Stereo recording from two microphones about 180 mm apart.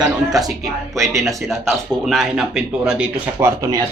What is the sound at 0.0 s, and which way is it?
A man's voice, centre (ahead or behind).